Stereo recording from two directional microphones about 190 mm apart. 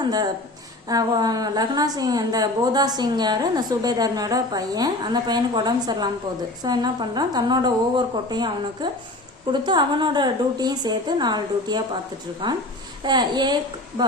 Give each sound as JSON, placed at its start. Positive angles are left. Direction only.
{"t": 0.0, "sound": "a woman's voice", "side_deg": -20}